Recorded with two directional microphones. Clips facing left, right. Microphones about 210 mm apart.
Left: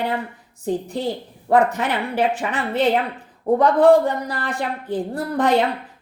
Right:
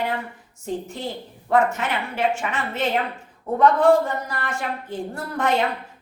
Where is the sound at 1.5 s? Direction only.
35° left (ahead or behind).